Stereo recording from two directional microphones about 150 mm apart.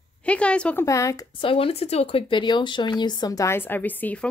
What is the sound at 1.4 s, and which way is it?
Speech, 35° left (ahead or behind).